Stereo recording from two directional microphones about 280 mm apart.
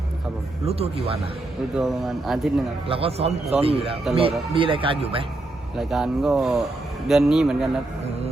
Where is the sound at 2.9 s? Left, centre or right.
Centre.